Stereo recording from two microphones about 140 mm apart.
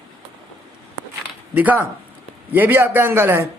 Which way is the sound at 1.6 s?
10° right (ahead or behind).